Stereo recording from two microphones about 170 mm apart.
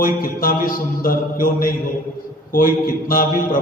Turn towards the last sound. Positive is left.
turn(degrees=55)  # may be behind; listen again after turning